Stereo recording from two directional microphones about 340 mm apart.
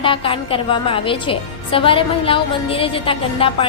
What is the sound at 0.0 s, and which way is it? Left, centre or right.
A woman's voice, centre.